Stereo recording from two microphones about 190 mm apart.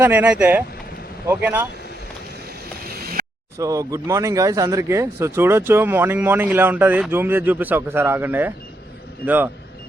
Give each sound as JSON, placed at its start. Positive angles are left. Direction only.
{"t": 0.0, "sound": "speech", "side_deg": -10}
{"t": 2.8, "sound": "a sound", "side_deg": -55}
{"t": 3.6, "sound": "speech", "side_deg": -15}